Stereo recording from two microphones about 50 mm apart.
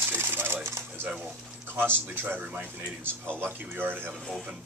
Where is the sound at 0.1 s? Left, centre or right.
Right.